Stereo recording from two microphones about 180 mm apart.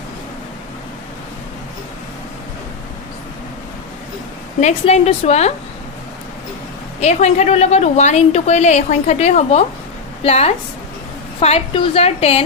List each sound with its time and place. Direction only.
4.6 s a woman's voice: 35° left (ahead or behind)
7.0 s a woman's voice: 40° left (ahead or behind)